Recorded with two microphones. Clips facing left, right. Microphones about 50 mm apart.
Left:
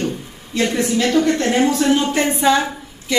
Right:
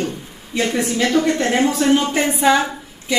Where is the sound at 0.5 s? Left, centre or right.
Centre.